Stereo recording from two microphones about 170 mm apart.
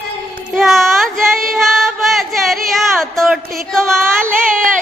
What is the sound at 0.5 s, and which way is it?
Music, centre (ahead or behind).